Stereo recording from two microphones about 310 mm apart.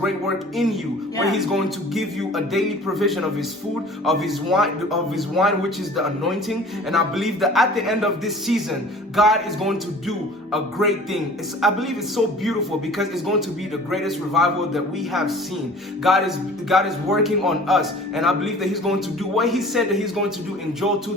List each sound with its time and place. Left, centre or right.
0.5 s a man's voice: centre
13.9 s a man's voice: centre